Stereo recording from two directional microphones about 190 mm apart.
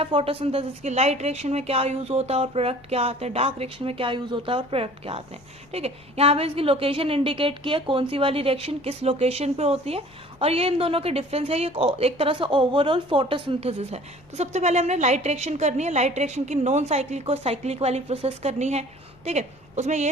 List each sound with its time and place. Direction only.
0.0 s a woman's voice: 30° right (ahead or behind)